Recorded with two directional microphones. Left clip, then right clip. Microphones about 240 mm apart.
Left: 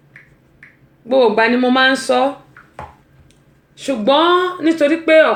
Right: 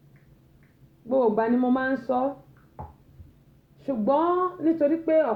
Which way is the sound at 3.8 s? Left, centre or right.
Left.